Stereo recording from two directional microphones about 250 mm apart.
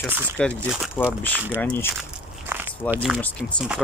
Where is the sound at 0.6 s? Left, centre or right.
Centre.